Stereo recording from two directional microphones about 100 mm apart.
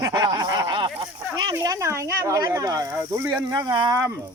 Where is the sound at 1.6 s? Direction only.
30° right (ahead or behind); by 3.9 s 50° right (ahead or behind).